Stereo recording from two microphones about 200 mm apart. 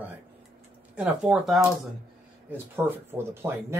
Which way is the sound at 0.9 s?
5° right (ahead or behind).